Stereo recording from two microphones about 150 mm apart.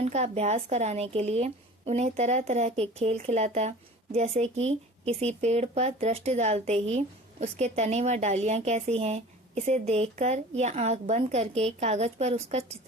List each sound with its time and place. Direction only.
0.0 s speech: 45° right (ahead or behind)